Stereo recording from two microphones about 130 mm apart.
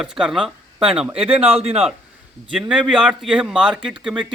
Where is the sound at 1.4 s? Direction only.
50° right (ahead or behind).